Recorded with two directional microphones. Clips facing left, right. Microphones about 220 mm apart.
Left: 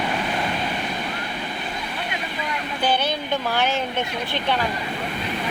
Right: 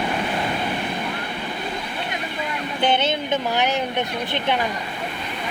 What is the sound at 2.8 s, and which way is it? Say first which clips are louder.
Speech: right 2 dB; 25° right (ahead or behind).